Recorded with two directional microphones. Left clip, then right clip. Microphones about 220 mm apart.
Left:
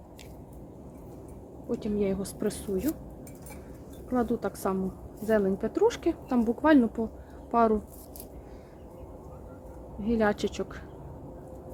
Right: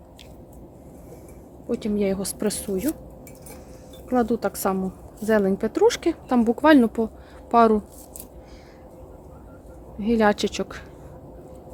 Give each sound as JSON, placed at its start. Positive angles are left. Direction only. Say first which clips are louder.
{"t": 1.7, "sound": "a woman's voice", "louder": "right 5 dB", "side_deg": -40}
{"t": 4.1, "sound": "speech", "louder": "right 7 dB", "side_deg": -40}
{"t": 10.0, "sound": "a woman's voice", "louder": "right 7 dB", "side_deg": -40}